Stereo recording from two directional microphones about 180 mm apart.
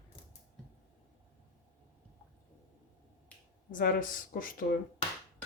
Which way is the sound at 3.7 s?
50° left (ahead or behind).